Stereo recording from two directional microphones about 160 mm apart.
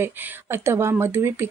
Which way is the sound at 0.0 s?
10° right (ahead or behind).